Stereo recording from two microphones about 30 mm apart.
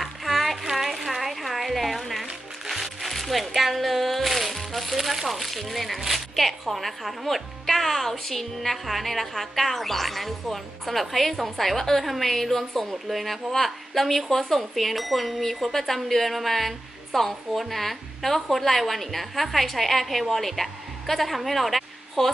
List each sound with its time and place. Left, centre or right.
0.0 s a sound: centre
2.6 s music: centre
4.9 s speech: centre
5.3 s a woman's voice: centre